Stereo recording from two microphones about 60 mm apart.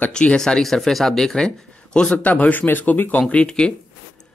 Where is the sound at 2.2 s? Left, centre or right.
Left.